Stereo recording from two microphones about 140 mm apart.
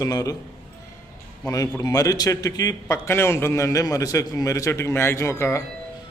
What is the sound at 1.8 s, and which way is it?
A man's voice, 25° left (ahead or behind).